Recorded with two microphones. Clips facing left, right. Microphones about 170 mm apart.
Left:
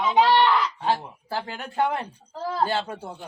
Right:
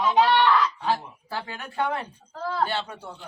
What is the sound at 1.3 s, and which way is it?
Speech, 30° left (ahead or behind).